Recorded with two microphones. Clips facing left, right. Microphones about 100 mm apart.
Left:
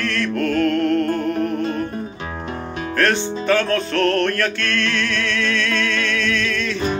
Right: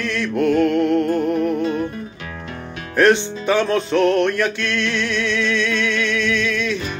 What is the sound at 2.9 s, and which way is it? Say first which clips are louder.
Music: right 5 dB; 15° right (ahead or behind).